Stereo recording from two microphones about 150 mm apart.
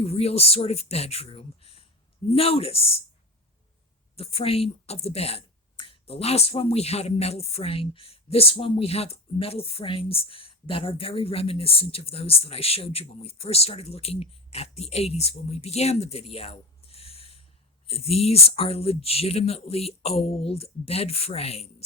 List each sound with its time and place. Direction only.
0.0 s speech: 45° left (ahead or behind)
4.2 s speech: 40° left (ahead or behind)